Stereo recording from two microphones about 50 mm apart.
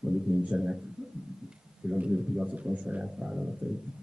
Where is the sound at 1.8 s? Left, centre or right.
Centre.